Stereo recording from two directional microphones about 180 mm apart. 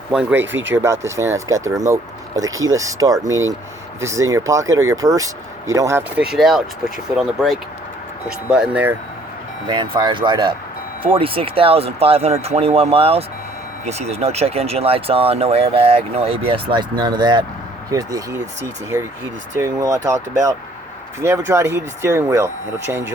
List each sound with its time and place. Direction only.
0.1 s speech: 5° right (ahead or behind)
9.6 s speech: 25° right (ahead or behind)
19.5 s speech: 15° right (ahead or behind)